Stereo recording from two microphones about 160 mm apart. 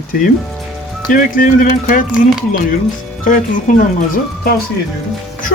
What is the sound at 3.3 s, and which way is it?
Speech, 55° left (ahead or behind).